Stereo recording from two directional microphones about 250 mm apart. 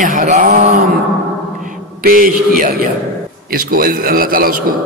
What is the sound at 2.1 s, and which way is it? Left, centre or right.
A man's voice, right.